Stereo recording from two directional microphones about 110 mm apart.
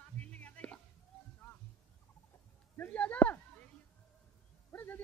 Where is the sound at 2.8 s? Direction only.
10° left (ahead or behind).